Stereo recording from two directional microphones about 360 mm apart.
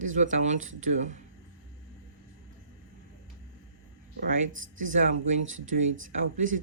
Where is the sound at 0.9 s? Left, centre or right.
Centre.